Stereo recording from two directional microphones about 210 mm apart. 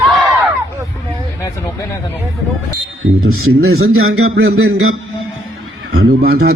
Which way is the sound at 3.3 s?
90° right.